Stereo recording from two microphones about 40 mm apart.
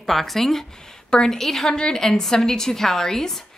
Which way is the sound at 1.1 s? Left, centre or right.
Centre.